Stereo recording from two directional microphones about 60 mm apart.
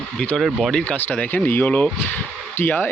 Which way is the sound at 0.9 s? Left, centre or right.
Left.